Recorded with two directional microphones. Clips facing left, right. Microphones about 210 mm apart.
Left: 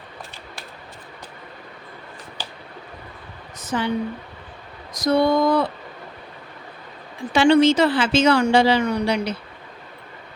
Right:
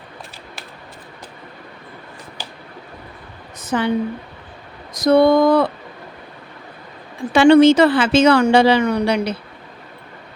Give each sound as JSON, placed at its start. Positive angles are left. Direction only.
{"t": 3.6, "sound": "a woman's voice", "side_deg": -55}
{"t": 4.9, "sound": "a woman's voice", "side_deg": -60}
{"t": 7.3, "sound": "a woman's voice", "side_deg": -55}